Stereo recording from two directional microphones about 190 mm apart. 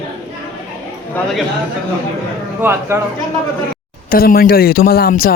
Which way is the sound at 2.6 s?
10° right (ahead or behind).